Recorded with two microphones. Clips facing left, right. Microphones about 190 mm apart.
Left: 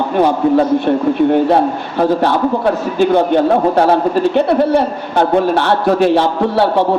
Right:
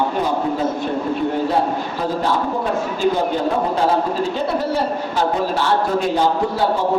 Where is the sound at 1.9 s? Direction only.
65° left (ahead or behind).